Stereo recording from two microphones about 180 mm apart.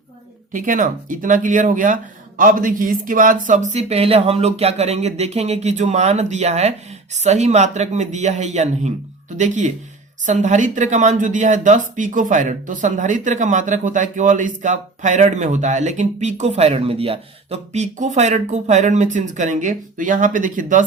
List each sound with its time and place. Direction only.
0.5 s speech: 45° right (ahead or behind)